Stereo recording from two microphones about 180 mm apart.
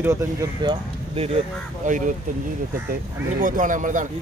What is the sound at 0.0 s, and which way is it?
Speech, 15° right (ahead or behind).